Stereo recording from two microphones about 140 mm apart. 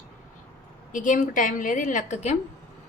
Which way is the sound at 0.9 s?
65° left (ahead or behind).